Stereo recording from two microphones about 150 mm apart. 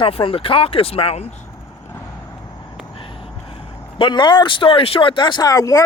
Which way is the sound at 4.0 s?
30° left (ahead or behind).